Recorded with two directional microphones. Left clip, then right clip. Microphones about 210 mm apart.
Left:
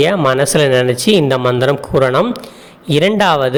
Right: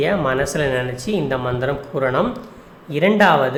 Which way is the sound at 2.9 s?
45° left (ahead or behind).